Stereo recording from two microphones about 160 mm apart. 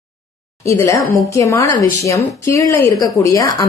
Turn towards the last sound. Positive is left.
turn(degrees=20)  # may be behind; listen again after turning